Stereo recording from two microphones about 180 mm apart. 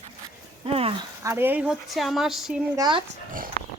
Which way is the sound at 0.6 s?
30° right (ahead or behind).